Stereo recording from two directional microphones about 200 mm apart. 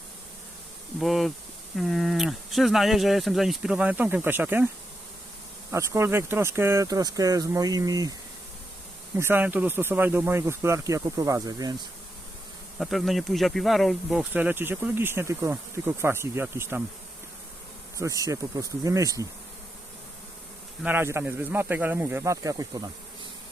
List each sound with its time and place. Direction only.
0.9 s speech: centre (ahead or behind)
5.7 s speech: 15° right (ahead or behind)
9.1 s speech: 10° right (ahead or behind)
12.8 s speech: centre (ahead or behind)
17.9 s speech: 15° right (ahead or behind)
20.8 s speech: 10° right (ahead or behind)